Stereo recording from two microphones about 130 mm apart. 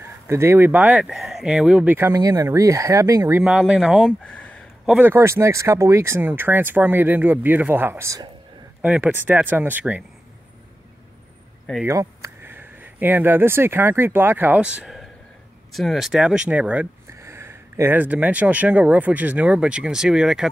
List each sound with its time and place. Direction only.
0.0 s speech: 20° right (ahead or behind)
2.0 s speech: 20° right (ahead or behind)
3.4 s speech: 5° right (ahead or behind)
4.2 s a sound: 10° left (ahead or behind)
4.8 s speech: 10° right (ahead or behind)
11.8 s speech: 25° right (ahead or behind)
17.1 s speech: 20° right (ahead or behind); by 20.4 s 5° right (ahead or behind)